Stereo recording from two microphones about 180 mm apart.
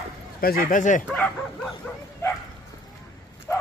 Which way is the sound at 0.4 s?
55° left (ahead or behind).